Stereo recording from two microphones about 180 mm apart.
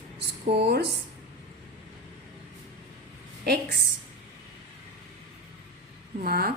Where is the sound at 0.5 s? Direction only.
70° right (ahead or behind).